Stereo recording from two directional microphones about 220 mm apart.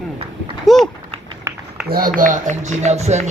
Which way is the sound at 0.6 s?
Centre (ahead or behind).